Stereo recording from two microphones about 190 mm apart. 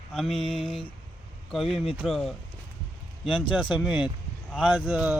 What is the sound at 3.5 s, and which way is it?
A man's voice, centre (ahead or behind).